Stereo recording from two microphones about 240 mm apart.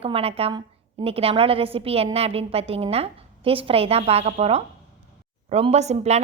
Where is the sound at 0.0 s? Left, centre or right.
Right.